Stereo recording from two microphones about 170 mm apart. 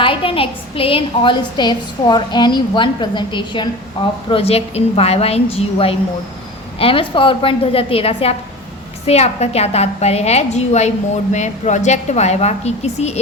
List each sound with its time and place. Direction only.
0.0 s a woman's voice: 30° left (ahead or behind)